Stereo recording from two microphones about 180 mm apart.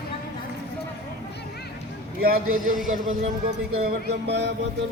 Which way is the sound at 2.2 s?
55° right (ahead or behind).